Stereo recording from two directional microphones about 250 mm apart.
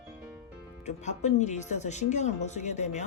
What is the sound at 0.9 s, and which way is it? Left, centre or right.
Speech, left.